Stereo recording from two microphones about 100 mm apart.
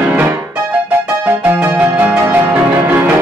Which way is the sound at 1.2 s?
20° right (ahead or behind).